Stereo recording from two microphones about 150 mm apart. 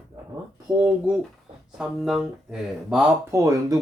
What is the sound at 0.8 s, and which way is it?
Speech, 5° right (ahead or behind).